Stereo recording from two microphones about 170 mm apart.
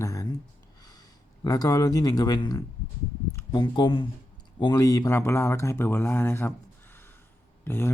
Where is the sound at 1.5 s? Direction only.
20° left (ahead or behind).